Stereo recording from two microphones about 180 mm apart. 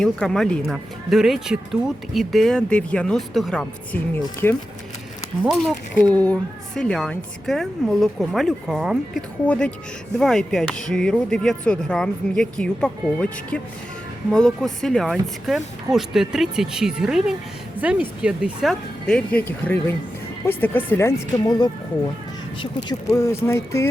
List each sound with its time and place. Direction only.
0.0 s speech: 5° left (ahead or behind)
6.1 s speech: 10° left (ahead or behind)
22.9 s speech: 20° left (ahead or behind)